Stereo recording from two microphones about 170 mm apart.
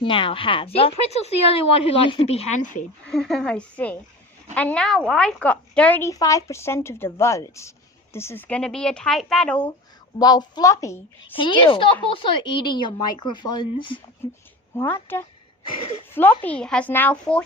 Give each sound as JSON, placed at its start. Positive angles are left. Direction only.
{"t": 0.0, "sound": "a woman's voice", "side_deg": 30}
{"t": 3.1, "sound": "a woman's voice", "side_deg": 0}
{"t": 10.2, "sound": "a woman's voice", "side_deg": 25}
{"t": 11.3, "sound": "a woman's voice", "side_deg": 30}
{"t": 14.7, "sound": "a woman's voice", "side_deg": 15}